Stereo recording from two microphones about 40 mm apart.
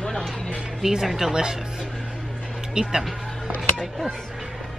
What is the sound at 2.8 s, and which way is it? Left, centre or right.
Speech, right.